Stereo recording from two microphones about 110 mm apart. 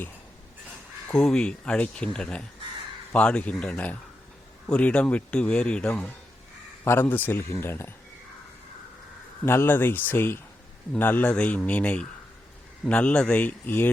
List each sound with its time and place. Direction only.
1.0 s speech: 5° left (ahead or behind); by 7.9 s 20° left (ahead or behind)
9.5 s speech: 20° left (ahead or behind)